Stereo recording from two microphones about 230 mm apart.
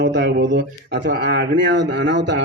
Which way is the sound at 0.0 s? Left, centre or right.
Right.